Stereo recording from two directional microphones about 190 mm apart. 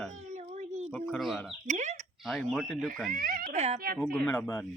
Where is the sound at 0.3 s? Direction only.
40° right (ahead or behind).